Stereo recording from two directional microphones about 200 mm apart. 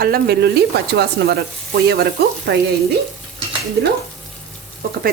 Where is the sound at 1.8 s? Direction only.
55° right (ahead or behind).